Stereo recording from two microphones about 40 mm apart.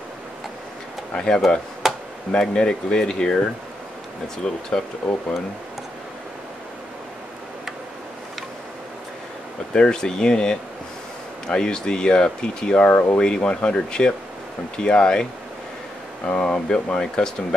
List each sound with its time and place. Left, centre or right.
1.1 s speech: centre
1.8 s a sound: centre
2.3 s speech: left
4.4 s speech: left
9.8 s speech: centre
12.9 s speech: left
13.2 s speech: left
16.3 s speech: left